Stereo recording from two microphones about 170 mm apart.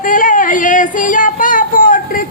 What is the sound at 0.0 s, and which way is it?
Female singing, 50° left (ahead or behind).